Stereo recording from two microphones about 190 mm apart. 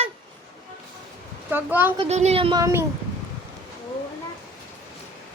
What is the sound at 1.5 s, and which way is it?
Speech, 10° right (ahead or behind).